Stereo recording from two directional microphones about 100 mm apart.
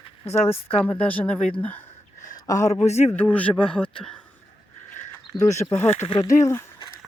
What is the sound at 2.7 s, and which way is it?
Speech, 85° left.